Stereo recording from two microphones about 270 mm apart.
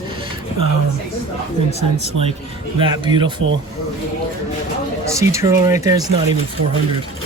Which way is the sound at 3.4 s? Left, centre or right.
Right.